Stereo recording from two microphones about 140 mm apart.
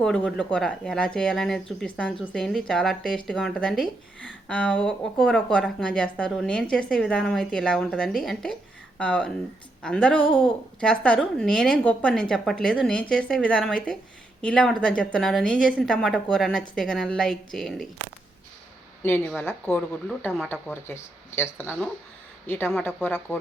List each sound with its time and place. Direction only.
0.0 s speech: 5° left (ahead or behind)
19.4 s speech: 15° left (ahead or behind)